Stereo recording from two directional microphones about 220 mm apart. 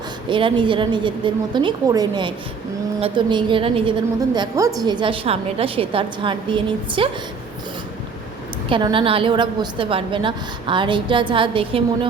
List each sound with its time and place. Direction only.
0.3 s a woman's voice: 20° right (ahead or behind)
8.7 s a woman's voice: 25° right (ahead or behind)